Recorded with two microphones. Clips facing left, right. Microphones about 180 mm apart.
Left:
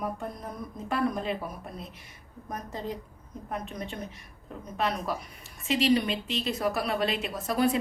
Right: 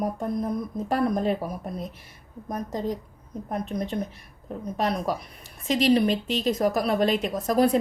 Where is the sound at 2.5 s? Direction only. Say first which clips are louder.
Right 6 dB; 40° right (ahead or behind).